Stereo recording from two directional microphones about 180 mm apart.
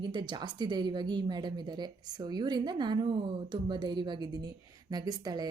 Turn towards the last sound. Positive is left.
turn(degrees=-20)  # may be behind; listen again after turning